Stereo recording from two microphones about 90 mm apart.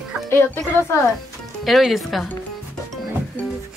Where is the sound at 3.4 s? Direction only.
20° left (ahead or behind).